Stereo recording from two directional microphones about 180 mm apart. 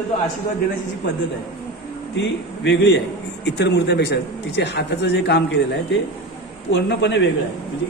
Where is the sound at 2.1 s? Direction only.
75° left (ahead or behind).